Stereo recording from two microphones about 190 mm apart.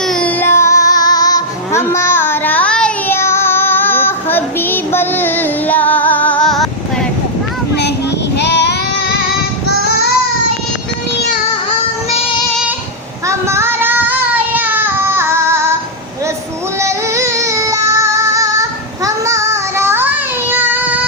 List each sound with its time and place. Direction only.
0.0 s child singing: 5° left (ahead or behind)
8.4 s child singing: 65° left (ahead or behind)
13.2 s child singing: 15° right (ahead or behind)
16.8 s child singing: 15° right (ahead or behind)